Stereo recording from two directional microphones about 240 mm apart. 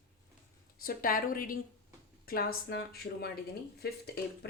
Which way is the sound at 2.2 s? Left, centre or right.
Left.